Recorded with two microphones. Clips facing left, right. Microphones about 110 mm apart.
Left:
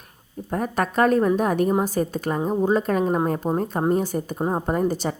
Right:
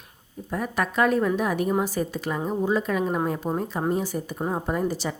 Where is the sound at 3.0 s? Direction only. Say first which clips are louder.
Left 4 dB; 30° left (ahead or behind).